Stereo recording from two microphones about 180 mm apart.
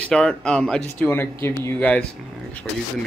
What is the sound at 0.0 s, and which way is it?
Speech, 5° left (ahead or behind).